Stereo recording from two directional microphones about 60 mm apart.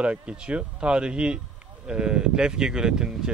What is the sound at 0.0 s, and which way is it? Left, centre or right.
Speech, right.